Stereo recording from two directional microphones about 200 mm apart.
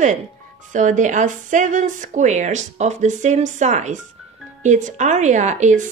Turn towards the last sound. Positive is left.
turn(degrees=-35)  # may be behind; listen again after turning